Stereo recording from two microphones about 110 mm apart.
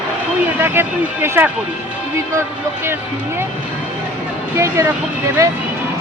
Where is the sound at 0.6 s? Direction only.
20° right (ahead or behind).